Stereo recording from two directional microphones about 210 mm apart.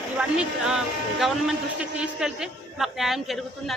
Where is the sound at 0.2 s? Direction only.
5° right (ahead or behind).